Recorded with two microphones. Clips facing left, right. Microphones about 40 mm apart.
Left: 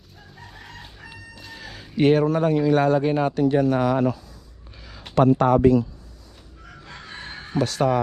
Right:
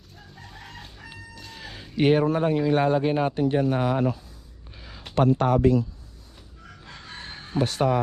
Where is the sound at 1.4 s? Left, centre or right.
Centre.